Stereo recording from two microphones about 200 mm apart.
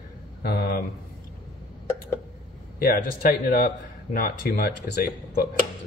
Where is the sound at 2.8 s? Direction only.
45° left (ahead or behind).